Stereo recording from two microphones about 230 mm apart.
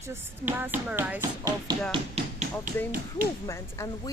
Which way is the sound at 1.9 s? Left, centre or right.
Right.